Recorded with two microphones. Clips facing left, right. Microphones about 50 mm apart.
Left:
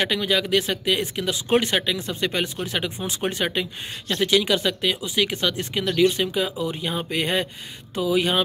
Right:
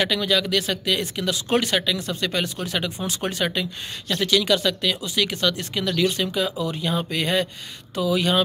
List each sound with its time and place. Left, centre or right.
0.0 s speech: centre